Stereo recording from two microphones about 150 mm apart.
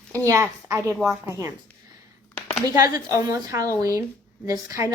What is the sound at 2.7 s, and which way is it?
A woman's voice, 20° right (ahead or behind).